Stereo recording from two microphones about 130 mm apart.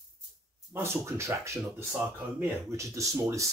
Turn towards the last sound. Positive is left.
turn(degrees=-25)  # may be behind; listen again after turning